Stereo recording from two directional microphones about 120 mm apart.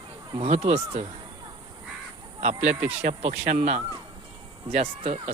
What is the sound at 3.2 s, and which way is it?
Speech, 80° right.